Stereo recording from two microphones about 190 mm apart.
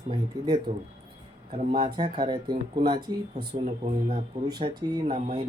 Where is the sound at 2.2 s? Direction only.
25° right (ahead or behind).